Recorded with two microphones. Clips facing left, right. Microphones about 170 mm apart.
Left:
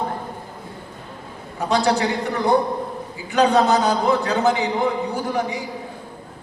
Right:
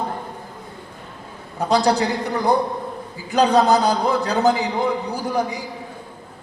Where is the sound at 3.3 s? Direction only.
35° right (ahead or behind).